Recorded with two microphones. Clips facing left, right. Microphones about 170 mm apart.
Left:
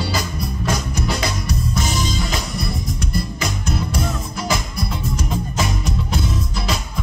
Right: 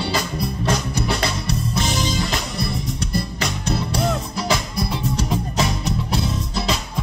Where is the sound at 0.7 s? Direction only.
30° right (ahead or behind).